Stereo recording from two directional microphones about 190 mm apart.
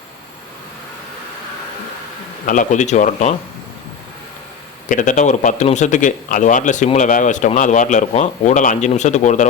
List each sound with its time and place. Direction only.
2.5 s speech: 40° left (ahead or behind)
4.9 s speech: 40° left (ahead or behind)